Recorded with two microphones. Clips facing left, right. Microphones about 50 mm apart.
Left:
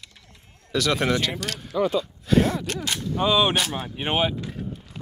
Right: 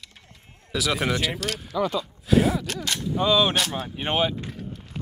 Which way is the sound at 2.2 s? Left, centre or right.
Centre.